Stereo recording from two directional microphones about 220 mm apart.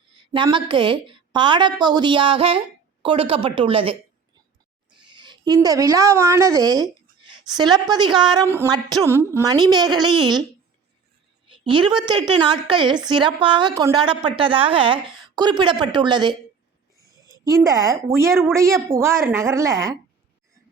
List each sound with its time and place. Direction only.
0.2 s a woman's voice: 20° right (ahead or behind)
5.0 s a woman's voice: 20° right (ahead or behind)
11.4 s a woman's voice: 20° right (ahead or behind)